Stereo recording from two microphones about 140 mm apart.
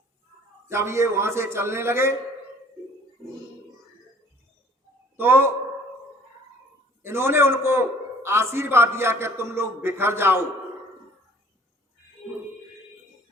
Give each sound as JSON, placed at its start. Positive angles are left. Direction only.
{"t": 0.7, "sound": "a man's voice", "side_deg": -20}
{"t": 5.1, "sound": "a man's voice", "side_deg": -15}
{"t": 7.0, "sound": "a man's voice", "side_deg": -15}